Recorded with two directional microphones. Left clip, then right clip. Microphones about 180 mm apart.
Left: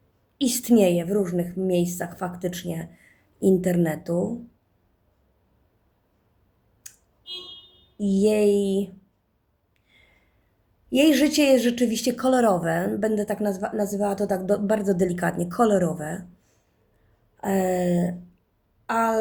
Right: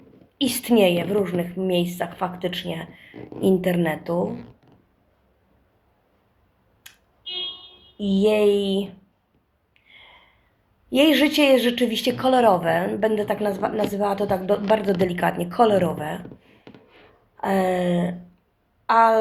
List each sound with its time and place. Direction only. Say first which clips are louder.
0.3 s a woman's voice: right 1 dB; 45° left (ahead or behind)
7.9 s a woman's voice: right 2 dB; 50° left (ahead or behind)
9.8 s a sound: right 10 dB; 45° left (ahead or behind)
10.8 s a woman's voice: right 2 dB; 45° left (ahead or behind)